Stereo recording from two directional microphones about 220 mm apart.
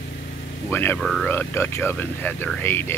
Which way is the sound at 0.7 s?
10° left (ahead or behind).